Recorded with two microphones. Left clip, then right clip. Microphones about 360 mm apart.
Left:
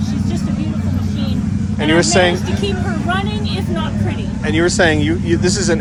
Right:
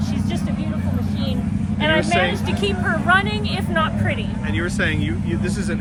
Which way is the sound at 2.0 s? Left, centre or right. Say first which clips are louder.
Left 6 dB; centre.